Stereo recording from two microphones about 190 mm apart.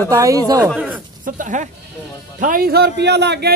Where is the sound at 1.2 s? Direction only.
40° right (ahead or behind).